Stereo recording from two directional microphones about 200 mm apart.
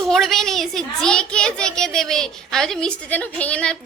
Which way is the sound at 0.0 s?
Centre (ahead or behind).